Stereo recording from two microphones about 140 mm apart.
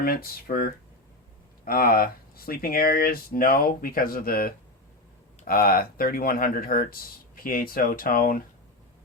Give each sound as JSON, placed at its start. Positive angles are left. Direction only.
{"t": 0.0, "sound": "speech", "side_deg": 90}